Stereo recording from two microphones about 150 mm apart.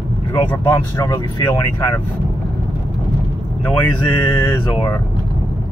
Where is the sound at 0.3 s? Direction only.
15° left (ahead or behind).